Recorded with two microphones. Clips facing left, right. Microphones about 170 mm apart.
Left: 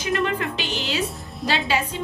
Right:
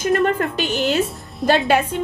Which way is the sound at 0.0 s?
50° right (ahead or behind).